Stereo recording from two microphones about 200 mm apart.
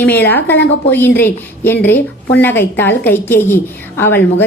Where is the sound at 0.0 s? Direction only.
10° left (ahead or behind).